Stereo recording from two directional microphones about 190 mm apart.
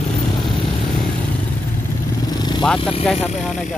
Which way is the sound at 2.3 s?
20° left (ahead or behind).